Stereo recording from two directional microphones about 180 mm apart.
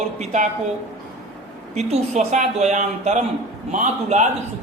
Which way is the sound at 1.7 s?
40° right (ahead or behind).